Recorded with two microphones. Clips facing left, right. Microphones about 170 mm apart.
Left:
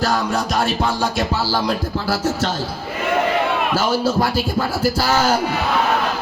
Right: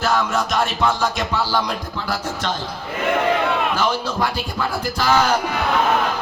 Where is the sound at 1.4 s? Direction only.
35° left (ahead or behind).